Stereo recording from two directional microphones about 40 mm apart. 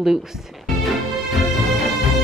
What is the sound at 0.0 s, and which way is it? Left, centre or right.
Speech, centre.